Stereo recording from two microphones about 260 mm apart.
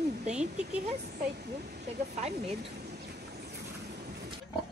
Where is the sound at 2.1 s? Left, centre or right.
Right.